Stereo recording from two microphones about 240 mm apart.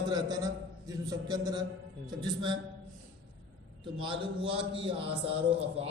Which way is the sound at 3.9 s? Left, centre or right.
Right.